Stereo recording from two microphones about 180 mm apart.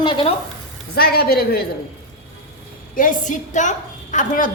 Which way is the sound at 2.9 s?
45° left (ahead or behind).